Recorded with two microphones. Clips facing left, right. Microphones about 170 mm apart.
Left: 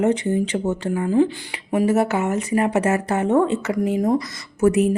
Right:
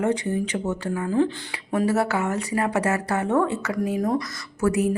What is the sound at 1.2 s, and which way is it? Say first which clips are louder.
A woman's voice: left 4 dB; 10° left (ahead or behind).